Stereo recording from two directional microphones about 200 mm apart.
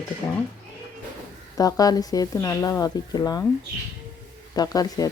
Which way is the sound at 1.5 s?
20° left (ahead or behind).